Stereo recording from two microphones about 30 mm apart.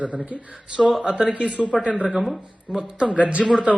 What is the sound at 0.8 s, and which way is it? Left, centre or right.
Speech, centre.